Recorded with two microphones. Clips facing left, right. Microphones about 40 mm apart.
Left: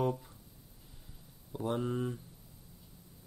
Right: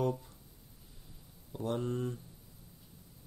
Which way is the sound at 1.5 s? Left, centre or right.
Centre.